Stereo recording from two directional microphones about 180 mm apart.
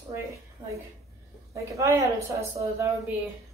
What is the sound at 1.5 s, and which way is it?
A woman's voice, 15° right (ahead or behind).